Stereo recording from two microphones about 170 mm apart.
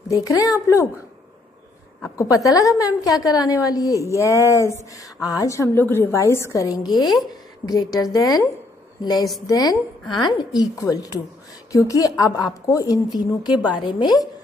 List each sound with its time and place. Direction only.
0.1 s a woman's voice: 20° left (ahead or behind)
2.1 s a woman's voice: 20° left (ahead or behind)